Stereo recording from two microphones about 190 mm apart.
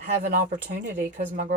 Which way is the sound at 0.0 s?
45° right (ahead or behind).